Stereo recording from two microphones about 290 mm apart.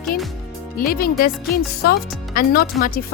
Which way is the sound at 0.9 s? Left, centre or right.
Left.